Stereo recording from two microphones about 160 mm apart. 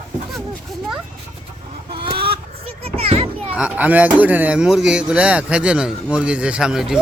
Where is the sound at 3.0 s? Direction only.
40° right (ahead or behind).